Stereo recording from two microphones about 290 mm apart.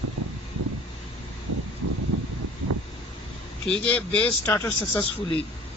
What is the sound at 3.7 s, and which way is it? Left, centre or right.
Speech, centre.